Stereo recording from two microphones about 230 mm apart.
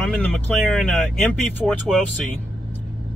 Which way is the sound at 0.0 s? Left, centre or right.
Centre.